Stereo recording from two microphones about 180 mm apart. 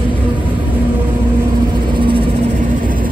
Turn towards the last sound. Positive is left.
turn(degrees=-30)  # may be behind; listen again after turning